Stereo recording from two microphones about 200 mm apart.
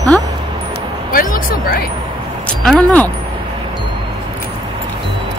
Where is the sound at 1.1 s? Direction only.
45° left (ahead or behind).